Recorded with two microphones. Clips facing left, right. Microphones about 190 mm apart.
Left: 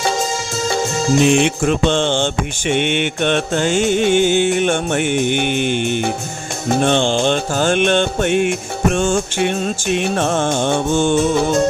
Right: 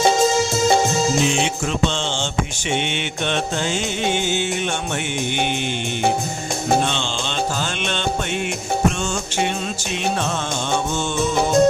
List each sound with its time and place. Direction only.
1.2 s music: 60° left (ahead or behind)
6.8 s music: 55° left (ahead or behind)